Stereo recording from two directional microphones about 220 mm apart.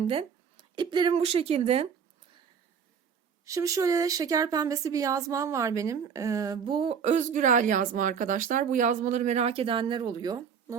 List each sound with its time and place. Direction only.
0.0 s speech: 25° right (ahead or behind)
3.4 s speech: 15° right (ahead or behind)